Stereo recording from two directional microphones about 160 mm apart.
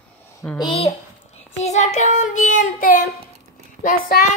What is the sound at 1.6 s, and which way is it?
Child singing, 45° left (ahead or behind).